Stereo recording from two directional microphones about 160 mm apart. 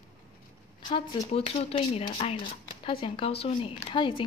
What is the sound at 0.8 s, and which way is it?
Speech, 35° left (ahead or behind).